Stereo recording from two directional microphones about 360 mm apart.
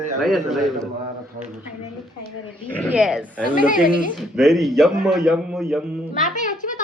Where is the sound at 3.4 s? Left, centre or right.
Left.